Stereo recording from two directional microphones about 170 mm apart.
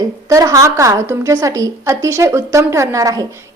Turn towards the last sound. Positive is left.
turn(degrees=-20)  # may be behind; listen again after turning